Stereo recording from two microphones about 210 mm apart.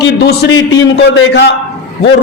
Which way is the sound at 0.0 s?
55° left (ahead or behind).